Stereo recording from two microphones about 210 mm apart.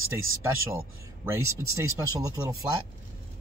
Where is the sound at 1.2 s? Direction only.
15° right (ahead or behind).